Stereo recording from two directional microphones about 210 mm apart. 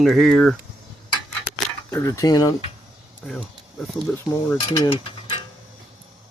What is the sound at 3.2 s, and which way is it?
Speech, centre (ahead or behind).